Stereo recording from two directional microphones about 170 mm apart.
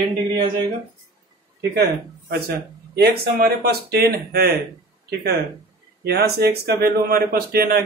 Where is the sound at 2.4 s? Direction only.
70° right (ahead or behind).